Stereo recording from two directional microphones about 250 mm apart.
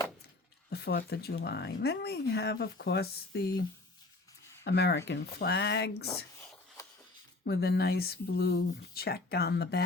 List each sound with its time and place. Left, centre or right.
0.7 s speech: left
4.6 s speech: left
6.8 s a sound: centre
7.4 s speech: left